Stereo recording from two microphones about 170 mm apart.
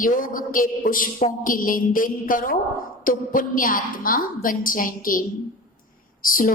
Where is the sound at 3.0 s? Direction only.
55° left (ahead or behind).